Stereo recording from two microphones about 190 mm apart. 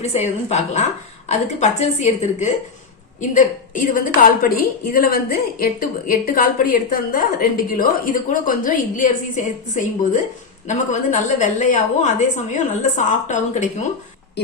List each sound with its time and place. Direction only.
0.0 s a woman's voice: 35° left (ahead or behind)